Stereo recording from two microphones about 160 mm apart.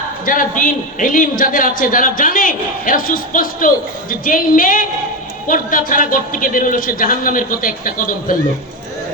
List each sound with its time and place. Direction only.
0.3 s a man's voice: 60° left (ahead or behind)